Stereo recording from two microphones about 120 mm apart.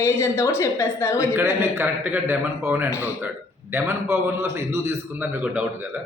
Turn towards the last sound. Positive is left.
turn(degrees=-20)  # may be behind; listen again after turning